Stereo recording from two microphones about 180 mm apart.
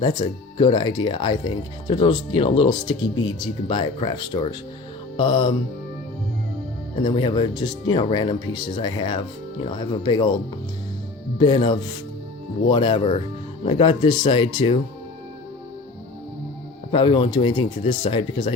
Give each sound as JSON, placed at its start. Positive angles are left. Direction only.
{"t": 0.0, "sound": "speech", "side_deg": 25}
{"t": 7.0, "sound": "speech", "side_deg": 25}
{"t": 11.3, "sound": "speech", "side_deg": 25}
{"t": 16.9, "sound": "speech", "side_deg": 30}